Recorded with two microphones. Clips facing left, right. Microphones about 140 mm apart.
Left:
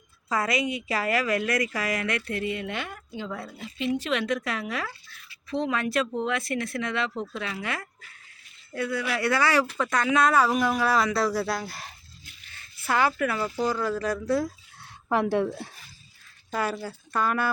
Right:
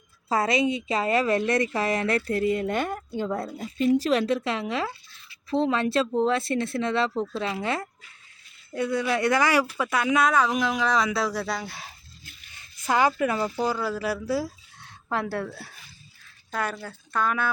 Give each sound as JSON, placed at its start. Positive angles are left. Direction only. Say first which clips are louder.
{"t": 0.3, "sound": "a woman's voice", "louder": "right 4 dB", "side_deg": -25}
{"t": 12.8, "sound": "speech", "louder": "right 2 dB", "side_deg": -15}
{"t": 14.8, "sound": "speech", "louder": "left 4 dB", "side_deg": 15}
{"t": 16.5, "sound": "speech", "louder": "left 2 dB", "side_deg": 5}